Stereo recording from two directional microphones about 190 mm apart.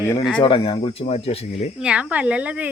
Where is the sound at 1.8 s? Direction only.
5° right (ahead or behind).